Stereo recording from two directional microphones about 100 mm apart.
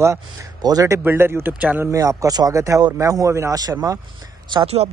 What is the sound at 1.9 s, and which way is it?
Speech, 35° right (ahead or behind).